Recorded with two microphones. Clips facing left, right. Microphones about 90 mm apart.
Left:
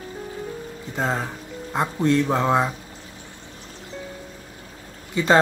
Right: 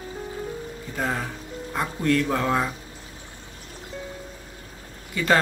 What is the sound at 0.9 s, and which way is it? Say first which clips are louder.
Speech: left 3 dB; 20° left (ahead or behind).